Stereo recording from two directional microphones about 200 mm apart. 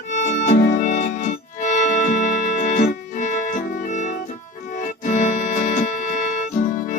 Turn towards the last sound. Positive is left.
turn(degrees=40)  # may be behind; listen again after turning